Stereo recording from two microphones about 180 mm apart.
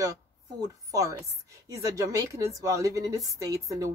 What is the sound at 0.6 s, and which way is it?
A woman's voice, 20° right (ahead or behind).